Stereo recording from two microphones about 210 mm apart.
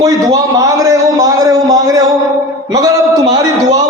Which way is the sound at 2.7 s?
15° right (ahead or behind).